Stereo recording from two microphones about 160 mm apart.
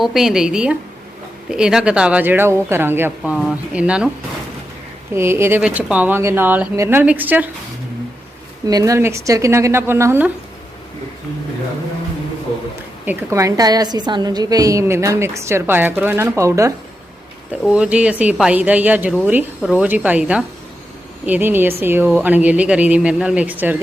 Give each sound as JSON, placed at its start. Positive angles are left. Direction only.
{"t": 0.0, "sound": "speech", "side_deg": 0}
{"t": 5.1, "sound": "speech", "side_deg": -15}
{"t": 8.6, "sound": "speech", "side_deg": -20}
{"t": 13.1, "sound": "a woman's voice", "side_deg": -20}
{"t": 17.7, "sound": "speech", "side_deg": -5}